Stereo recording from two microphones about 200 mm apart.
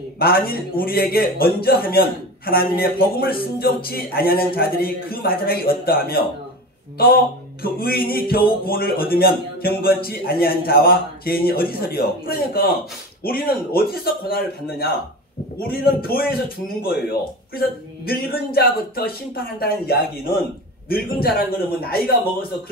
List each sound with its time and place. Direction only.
0.2 s a man's voice: 50° left (ahead or behind)
7.6 s a man's voice: 50° left (ahead or behind)